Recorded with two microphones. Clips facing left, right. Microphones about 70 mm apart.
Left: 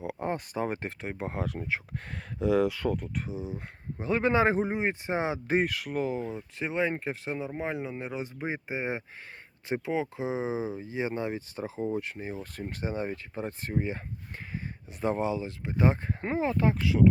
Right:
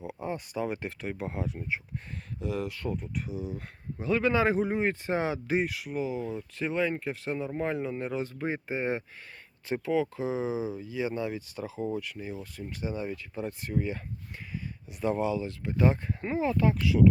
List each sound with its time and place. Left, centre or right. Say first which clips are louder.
0.0 s speech: left 3 dB; left
1.5 s speech: left 1 dB; left
2.8 s speech: left 4 dB; left
3.2 s speech: even; left
4.7 s speech: right 1 dB; centre
5.5 s speech: left 2 dB; left
6.1 s speech: even; left
7.3 s speech: right 3 dB; centre; by 12.5 s left
12.5 s speech: left 2 dB; left
15.0 s speech: even; left